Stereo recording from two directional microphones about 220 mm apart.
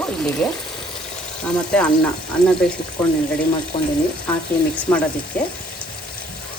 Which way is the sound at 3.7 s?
25° left (ahead or behind).